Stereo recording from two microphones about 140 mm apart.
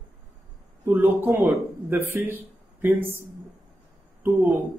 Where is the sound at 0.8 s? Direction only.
10° right (ahead or behind).